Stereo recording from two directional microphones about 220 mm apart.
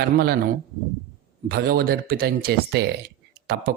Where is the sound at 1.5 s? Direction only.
45° right (ahead or behind).